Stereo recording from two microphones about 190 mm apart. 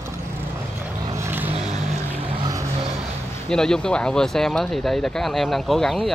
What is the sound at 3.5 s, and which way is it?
Speech, 5° left (ahead or behind).